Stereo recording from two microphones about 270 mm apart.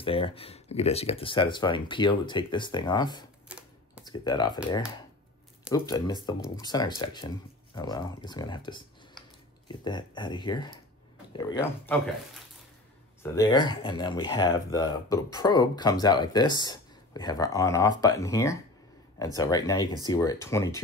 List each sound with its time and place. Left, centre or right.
0.0 s speech: centre
3.4 s camera: centre
4.0 s speech: centre
5.7 s speech: centre
13.2 s speech: centre